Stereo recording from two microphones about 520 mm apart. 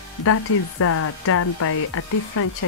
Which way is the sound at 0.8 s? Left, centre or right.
Left.